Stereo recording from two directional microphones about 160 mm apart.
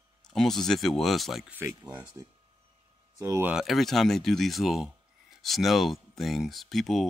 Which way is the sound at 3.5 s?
Centre (ahead or behind).